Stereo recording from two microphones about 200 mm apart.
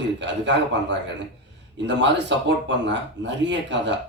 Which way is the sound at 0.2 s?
60° right (ahead or behind).